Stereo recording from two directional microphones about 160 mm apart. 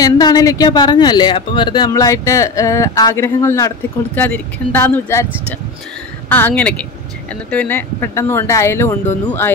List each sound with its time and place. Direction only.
0.0 s speech: 25° left (ahead or behind)
6.2 s speech: 10° left (ahead or behind)